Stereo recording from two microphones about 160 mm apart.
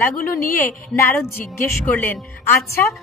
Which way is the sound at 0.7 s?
10° left (ahead or behind).